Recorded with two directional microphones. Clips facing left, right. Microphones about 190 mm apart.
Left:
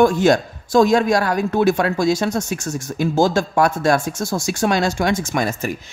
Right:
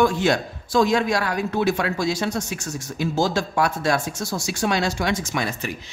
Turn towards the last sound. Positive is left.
turn(degrees=45)  # may be behind; listen again after turning